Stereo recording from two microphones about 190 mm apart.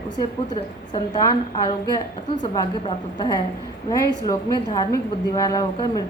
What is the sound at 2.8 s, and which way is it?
A woman's voice, 20° left (ahead or behind).